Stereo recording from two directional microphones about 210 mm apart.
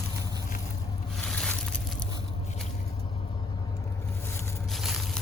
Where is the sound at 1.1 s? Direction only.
5° left (ahead or behind).